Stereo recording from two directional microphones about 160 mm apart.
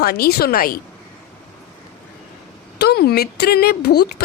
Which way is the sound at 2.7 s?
85° left.